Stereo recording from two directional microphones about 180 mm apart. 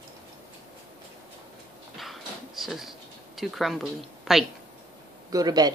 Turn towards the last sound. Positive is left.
turn(degrees=-20)  # may be behind; listen again after turning